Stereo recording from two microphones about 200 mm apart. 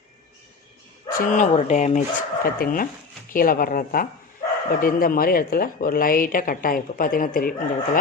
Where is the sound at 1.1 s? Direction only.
40° left (ahead or behind).